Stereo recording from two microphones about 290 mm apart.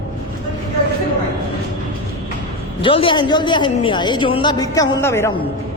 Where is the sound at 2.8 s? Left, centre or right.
Centre.